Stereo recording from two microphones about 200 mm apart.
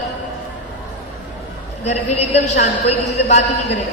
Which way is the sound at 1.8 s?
30° left (ahead or behind).